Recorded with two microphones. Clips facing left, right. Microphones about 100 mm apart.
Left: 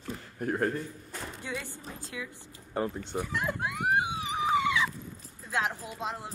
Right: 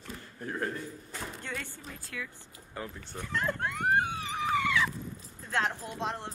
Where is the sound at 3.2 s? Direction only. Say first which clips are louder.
Right 5 dB; 10° left (ahead or behind).